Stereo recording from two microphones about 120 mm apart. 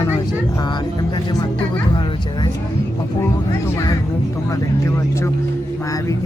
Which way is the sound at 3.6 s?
25° left (ahead or behind).